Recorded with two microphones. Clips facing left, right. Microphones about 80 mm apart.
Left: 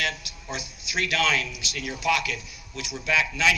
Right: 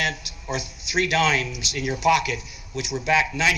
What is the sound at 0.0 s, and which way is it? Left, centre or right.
A man's voice, right.